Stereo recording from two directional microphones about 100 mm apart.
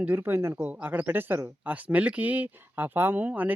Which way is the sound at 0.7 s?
15° right (ahead or behind).